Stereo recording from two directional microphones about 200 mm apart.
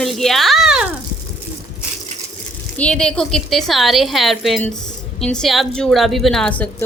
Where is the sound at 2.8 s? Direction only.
5° left (ahead or behind).